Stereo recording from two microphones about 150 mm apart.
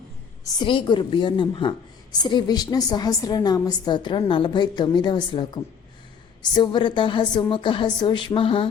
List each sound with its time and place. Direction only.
0.4 s a woman's voice: 30° left (ahead or behind)
6.5 s a woman's voice: 30° left (ahead or behind)